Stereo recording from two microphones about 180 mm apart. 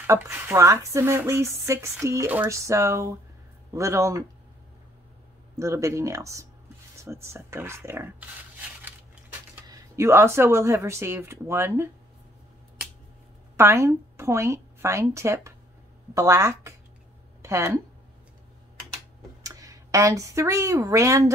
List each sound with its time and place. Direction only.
0.0 s speech: 15° right (ahead or behind)
5.6 s speech: 15° right (ahead or behind)
9.7 s speech: 15° right (ahead or behind)
13.6 s a woman's voice: 15° right (ahead or behind)
19.4 s speech: 20° right (ahead or behind)